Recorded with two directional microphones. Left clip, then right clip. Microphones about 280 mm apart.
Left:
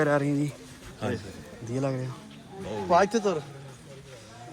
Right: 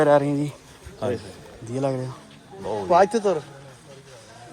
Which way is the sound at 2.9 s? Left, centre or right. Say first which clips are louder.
Right 5 dB; right.